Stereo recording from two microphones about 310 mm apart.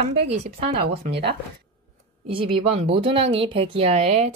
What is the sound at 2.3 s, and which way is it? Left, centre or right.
Speech, centre.